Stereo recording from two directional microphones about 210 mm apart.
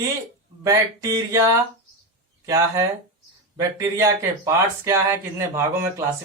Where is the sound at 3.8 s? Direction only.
15° right (ahead or behind).